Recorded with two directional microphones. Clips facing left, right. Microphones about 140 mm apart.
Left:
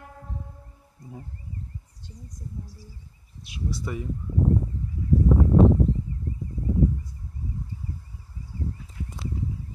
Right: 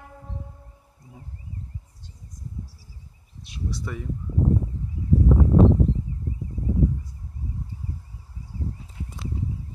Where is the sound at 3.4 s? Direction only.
5° left (ahead or behind).